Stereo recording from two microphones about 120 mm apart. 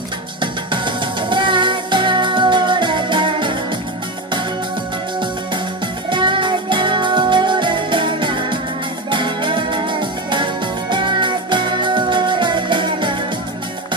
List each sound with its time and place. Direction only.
0.4 s music: 40° right (ahead or behind)
6.0 s music: 40° right (ahead or behind)